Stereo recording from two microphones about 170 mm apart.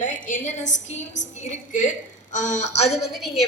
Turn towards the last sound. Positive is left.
turn(degrees=0)  # may be behind; listen again after turning